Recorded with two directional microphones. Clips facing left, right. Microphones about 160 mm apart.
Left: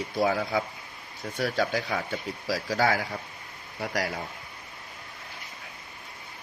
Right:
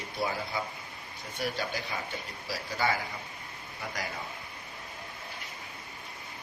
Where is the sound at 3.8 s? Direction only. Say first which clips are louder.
Left 8 dB; 75° left (ahead or behind).